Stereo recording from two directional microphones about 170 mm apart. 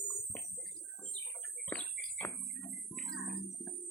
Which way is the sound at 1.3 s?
5° left (ahead or behind).